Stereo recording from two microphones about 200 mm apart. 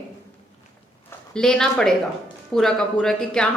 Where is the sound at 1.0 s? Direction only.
5° left (ahead or behind).